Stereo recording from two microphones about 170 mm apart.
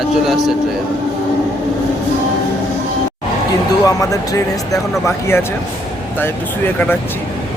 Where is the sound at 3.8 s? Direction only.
20° left (ahead or behind).